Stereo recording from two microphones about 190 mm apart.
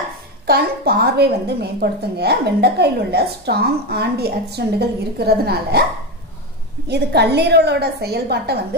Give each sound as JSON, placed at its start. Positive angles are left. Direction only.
{"t": 0.5, "sound": "a woman's voice", "side_deg": -55}
{"t": 6.9, "sound": "a woman's voice", "side_deg": -60}